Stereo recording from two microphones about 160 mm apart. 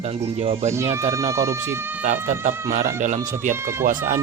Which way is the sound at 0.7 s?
15° right (ahead or behind).